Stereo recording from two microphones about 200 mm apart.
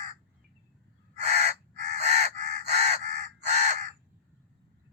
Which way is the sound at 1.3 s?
35° right (ahead or behind).